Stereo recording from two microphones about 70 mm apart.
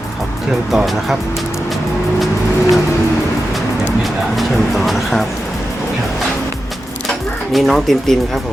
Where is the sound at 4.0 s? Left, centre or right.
Centre.